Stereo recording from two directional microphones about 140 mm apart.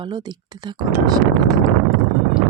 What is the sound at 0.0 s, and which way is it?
Speech, 30° right (ahead or behind).